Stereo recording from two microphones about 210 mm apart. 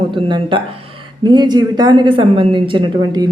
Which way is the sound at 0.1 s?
25° right (ahead or behind).